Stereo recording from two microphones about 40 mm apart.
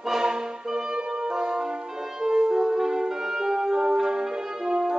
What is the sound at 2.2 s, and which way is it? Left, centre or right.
French horn, centre.